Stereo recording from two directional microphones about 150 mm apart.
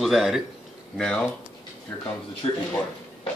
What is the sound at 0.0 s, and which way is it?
A man's voice, centre (ahead or behind).